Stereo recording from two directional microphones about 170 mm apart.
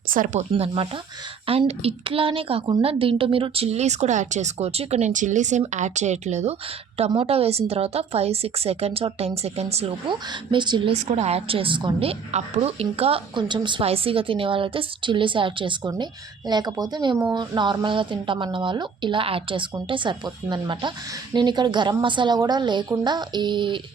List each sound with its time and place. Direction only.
0.1 s speech: 55° right (ahead or behind)
1.5 s a woman's voice: 35° right (ahead or behind)
10.9 s a woman's voice: 40° right (ahead or behind)